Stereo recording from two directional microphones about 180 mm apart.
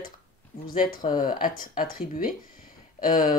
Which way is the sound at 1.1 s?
50° left (ahead or behind).